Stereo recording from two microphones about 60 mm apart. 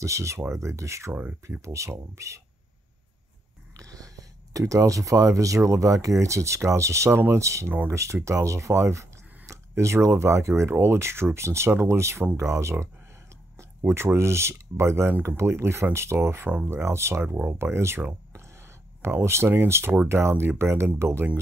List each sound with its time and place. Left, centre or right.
0.0 s speech: right
1.1 s speech: right
1.6 s speech: right
3.7 s speech: right
7.1 s speech: right
16.2 s speech: right
18.3 s a sound: right
20.1 s speech: right